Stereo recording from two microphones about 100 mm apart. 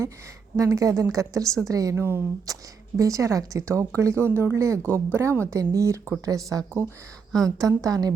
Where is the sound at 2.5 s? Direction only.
35° right (ahead or behind).